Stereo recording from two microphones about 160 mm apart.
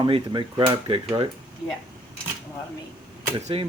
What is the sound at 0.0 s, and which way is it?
Speech, 30° right (ahead or behind).